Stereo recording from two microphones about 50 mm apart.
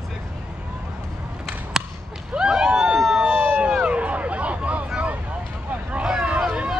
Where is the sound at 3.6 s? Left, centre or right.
Centre.